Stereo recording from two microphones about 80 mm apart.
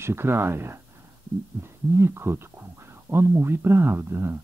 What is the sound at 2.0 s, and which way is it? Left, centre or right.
Speech, right.